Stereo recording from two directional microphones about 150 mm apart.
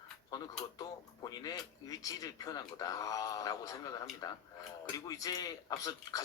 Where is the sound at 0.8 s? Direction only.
25° left (ahead or behind).